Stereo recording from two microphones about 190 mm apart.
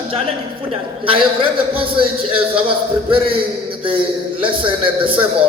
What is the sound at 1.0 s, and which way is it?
Speech, 30° right (ahead or behind).